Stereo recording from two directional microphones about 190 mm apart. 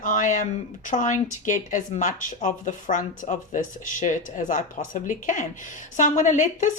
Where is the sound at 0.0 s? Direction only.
40° left (ahead or behind).